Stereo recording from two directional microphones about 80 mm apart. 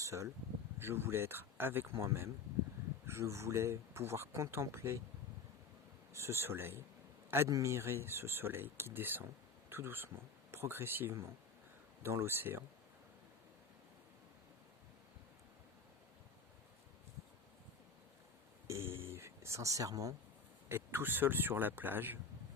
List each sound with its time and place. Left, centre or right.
0.0 s speech: right
6.1 s speech: right
18.7 s a sound: right
20.7 s speech: right